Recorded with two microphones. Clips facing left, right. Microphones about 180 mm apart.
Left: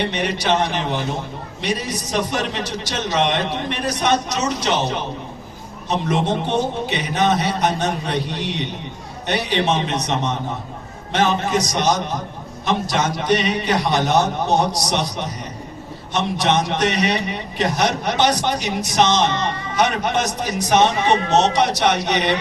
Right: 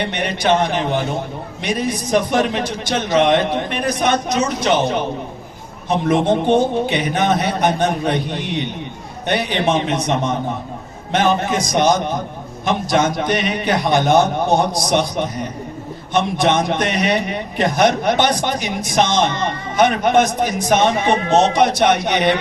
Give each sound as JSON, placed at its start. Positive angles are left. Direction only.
{"t": 0.1, "sound": "a man's voice", "side_deg": -55}
{"t": 11.1, "sound": "a man's voice", "side_deg": -55}